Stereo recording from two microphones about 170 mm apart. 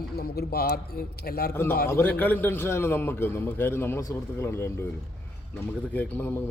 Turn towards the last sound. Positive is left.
turn(degrees=10)  # may be behind; listen again after turning